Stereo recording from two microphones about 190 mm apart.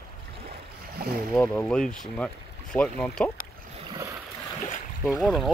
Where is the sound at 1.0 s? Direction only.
50° right (ahead or behind).